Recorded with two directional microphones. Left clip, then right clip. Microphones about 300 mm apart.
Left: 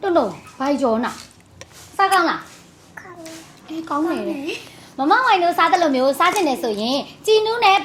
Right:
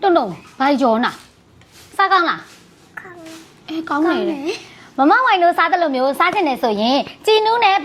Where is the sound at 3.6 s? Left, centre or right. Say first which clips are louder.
Right 3 dB; right.